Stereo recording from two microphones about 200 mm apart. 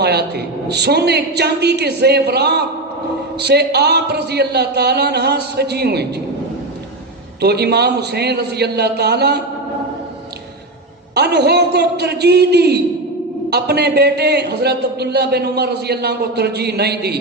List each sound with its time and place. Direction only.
0.0 s a man's voice: 55° right (ahead or behind)
7.4 s a man's voice: 55° right (ahead or behind)
11.1 s a man's voice: 55° right (ahead or behind)